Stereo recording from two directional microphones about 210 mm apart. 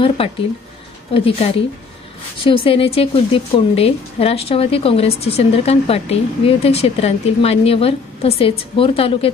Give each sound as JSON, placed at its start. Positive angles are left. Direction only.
{"t": 1.1, "sound": "a woman's voice", "side_deg": 25}